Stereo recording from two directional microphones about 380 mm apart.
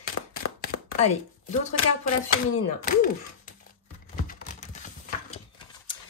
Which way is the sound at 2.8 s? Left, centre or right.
Left.